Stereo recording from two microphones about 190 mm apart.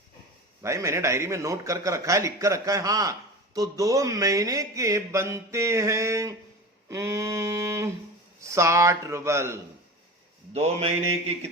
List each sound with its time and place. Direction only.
0.6 s a man's voice: 15° right (ahead or behind)
10.5 s speech: 30° right (ahead or behind)